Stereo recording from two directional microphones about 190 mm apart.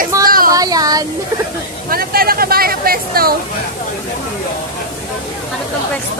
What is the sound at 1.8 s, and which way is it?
Speech, 50° right (ahead or behind).